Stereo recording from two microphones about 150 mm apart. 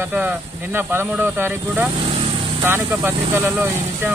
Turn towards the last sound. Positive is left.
turn(degrees=-15)  # may be behind; listen again after turning